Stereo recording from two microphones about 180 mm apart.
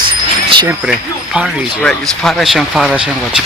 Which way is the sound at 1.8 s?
5° left (ahead or behind).